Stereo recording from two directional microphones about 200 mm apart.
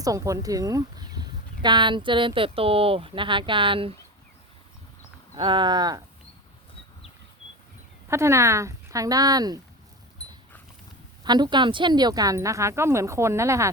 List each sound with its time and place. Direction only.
0.0 s speech: 15° right (ahead or behind)
5.3 s speech: 25° right (ahead or behind)
8.1 s a woman's voice: 15° right (ahead or behind)
11.2 s a woman's voice: 20° right (ahead or behind)